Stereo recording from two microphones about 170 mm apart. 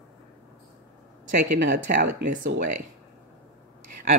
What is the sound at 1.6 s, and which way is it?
Speech, 50° right (ahead or behind).